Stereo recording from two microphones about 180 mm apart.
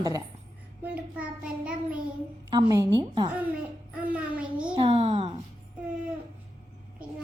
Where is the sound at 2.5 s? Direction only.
20° right (ahead or behind).